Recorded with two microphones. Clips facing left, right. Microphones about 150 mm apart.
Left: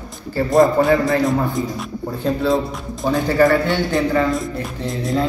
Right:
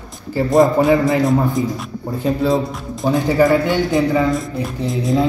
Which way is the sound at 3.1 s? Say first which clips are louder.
Right 1 dB; 15° right (ahead or behind).